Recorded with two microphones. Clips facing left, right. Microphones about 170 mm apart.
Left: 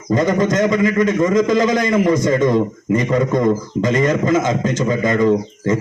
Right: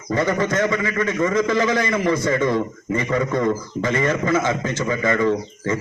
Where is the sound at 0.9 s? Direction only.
20° left (ahead or behind).